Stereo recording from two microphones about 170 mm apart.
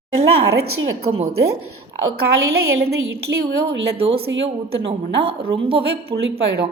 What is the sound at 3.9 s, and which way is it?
Speech, 35° right (ahead or behind).